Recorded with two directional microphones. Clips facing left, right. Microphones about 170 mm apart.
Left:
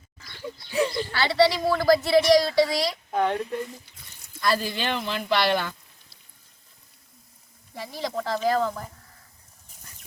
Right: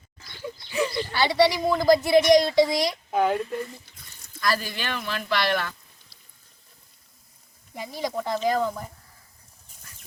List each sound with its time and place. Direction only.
0.4 s a sound: centre (ahead or behind)
1.1 s a woman's voice: 15° right (ahead or behind)
3.1 s speech: 5° right (ahead or behind)
4.4 s speech: 25° left (ahead or behind)
7.9 s speech: centre (ahead or behind)
8.4 s speech: 15° right (ahead or behind)